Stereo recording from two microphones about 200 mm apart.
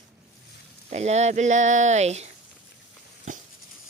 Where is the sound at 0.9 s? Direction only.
35° right (ahead or behind).